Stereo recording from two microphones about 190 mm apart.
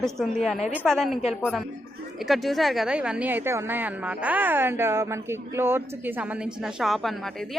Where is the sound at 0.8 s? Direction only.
Centre (ahead or behind).